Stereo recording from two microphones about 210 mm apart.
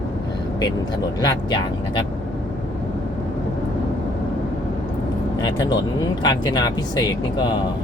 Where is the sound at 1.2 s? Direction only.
20° left (ahead or behind).